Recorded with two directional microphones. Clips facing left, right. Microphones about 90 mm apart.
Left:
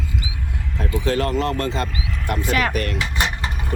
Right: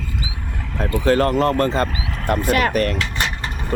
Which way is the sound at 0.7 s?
45° right (ahead or behind).